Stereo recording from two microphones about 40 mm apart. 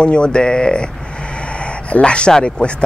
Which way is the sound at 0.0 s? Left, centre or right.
Left.